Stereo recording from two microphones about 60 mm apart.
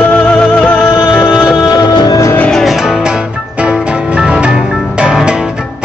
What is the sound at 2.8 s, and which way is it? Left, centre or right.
Music, centre.